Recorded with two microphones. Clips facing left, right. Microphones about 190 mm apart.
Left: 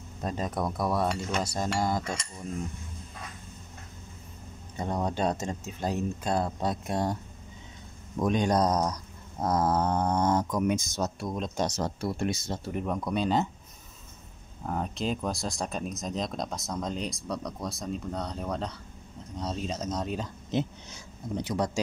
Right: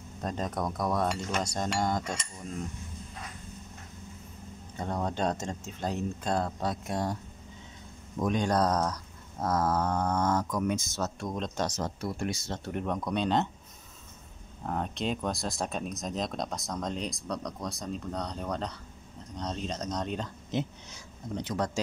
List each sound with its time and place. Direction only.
0.2 s speech: 5° left (ahead or behind)
4.7 s speech: 15° left (ahead or behind)
6.6 s speech: 25° left (ahead or behind)
8.3 s speech: 15° left (ahead or behind)
11.8 s speech: 25° left (ahead or behind)
12.5 s speech: 5° left (ahead or behind)
14.7 s speech: centre (ahead or behind)
21.4 s speech: 10° left (ahead or behind)